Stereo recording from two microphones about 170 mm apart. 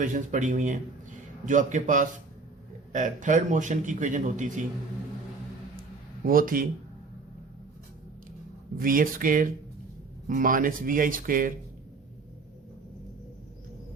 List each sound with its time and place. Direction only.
0.0 s a man's voice: 50° right (ahead or behind)
6.2 s speech: 55° right (ahead or behind)
8.8 s a man's voice: 55° right (ahead or behind)